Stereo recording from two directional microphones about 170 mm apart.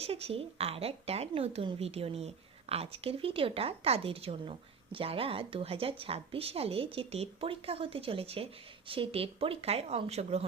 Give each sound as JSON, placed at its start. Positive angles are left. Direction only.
{"t": 0.0, "sound": "speech", "side_deg": -35}